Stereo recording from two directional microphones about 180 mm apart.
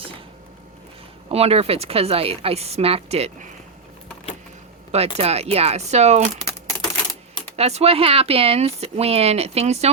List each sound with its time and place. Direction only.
1.3 s speech: 35° right (ahead or behind)
5.1 s speech: 35° right (ahead or behind)
6.4 s typewriter: 20° left (ahead or behind)
7.5 s speech: 35° right (ahead or behind)